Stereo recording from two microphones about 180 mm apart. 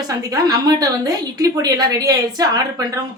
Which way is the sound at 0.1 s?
20° right (ahead or behind).